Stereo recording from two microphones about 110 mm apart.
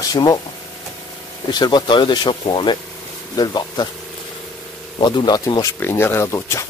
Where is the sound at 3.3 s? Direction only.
40° left (ahead or behind).